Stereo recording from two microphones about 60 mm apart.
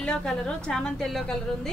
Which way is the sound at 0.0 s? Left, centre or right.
Centre.